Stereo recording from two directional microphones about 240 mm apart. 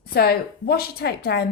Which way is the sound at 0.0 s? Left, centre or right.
Left.